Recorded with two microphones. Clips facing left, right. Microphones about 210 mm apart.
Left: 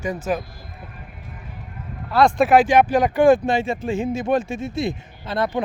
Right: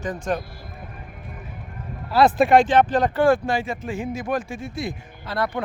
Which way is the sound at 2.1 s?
5° right (ahead or behind).